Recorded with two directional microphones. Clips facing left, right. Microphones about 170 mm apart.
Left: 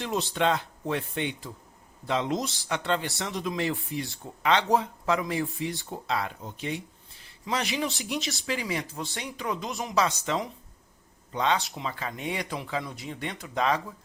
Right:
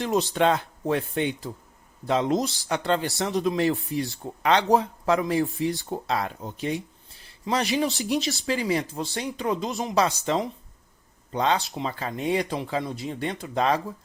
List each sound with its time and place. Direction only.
0.0 s speech: 45° right (ahead or behind)